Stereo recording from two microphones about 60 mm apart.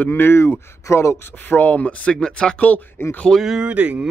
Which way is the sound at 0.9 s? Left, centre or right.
Left.